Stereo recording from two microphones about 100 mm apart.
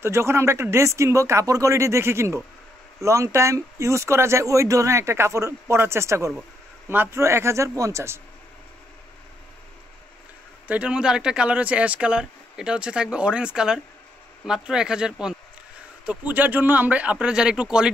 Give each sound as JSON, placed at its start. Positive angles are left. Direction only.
{"t": 0.0, "sound": "speech", "side_deg": -25}
{"t": 10.7, "sound": "speech", "side_deg": -10}